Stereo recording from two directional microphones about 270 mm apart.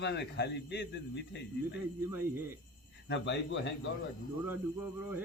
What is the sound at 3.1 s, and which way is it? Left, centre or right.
Speech, left.